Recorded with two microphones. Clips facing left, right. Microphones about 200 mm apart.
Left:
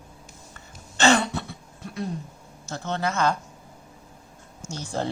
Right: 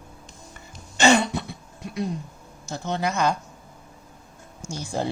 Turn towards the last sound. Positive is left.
turn(degrees=-10)  # may be behind; listen again after turning